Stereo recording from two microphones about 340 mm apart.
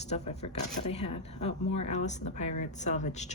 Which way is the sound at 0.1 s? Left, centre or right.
Centre.